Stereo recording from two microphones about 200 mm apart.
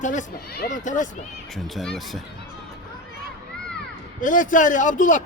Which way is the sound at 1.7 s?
Centre (ahead or behind).